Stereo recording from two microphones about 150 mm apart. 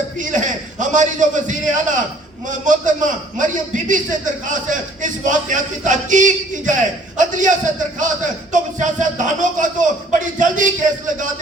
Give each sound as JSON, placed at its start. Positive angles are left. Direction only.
{"t": 0.2, "sound": "a man's voice", "side_deg": -55}